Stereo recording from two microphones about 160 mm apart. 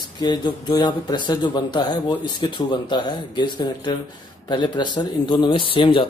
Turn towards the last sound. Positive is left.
turn(degrees=30)  # may be behind; listen again after turning